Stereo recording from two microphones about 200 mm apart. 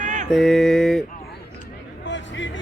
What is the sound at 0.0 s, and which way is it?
Mantra, 40° right (ahead or behind).